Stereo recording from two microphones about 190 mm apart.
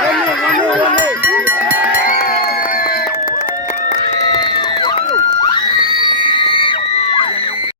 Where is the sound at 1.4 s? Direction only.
10° right (ahead or behind).